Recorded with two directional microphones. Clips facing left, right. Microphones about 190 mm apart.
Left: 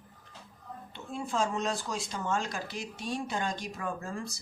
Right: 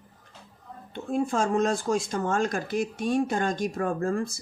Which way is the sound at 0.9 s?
50° right (ahead or behind).